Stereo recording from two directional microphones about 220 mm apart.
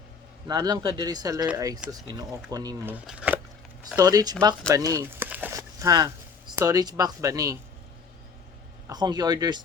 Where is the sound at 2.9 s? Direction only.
5° right (ahead or behind).